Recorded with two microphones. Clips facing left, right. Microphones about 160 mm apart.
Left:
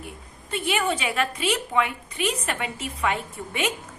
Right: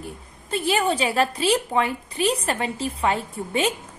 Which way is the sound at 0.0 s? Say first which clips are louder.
Right 3 dB; 35° right (ahead or behind).